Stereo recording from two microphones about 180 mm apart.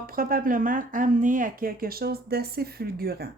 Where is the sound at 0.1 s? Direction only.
55° right (ahead or behind).